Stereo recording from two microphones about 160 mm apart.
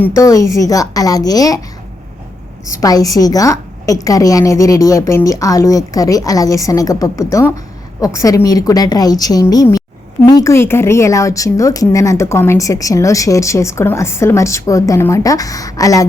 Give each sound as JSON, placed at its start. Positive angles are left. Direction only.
{"t": 0.0, "sound": "speech", "side_deg": 20}
{"t": 2.6, "sound": "speech", "side_deg": 20}